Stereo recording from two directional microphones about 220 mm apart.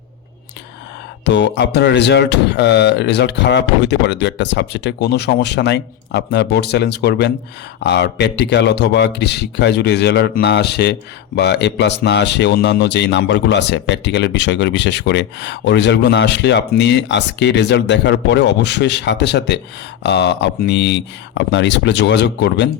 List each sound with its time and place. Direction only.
1.2 s speech: 55° left (ahead or behind)